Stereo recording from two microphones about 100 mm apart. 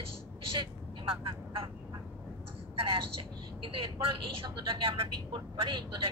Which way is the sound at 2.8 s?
65° right (ahead or behind).